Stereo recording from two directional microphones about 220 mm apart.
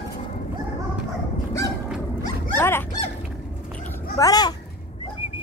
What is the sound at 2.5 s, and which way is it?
Dog, 10° left (ahead or behind).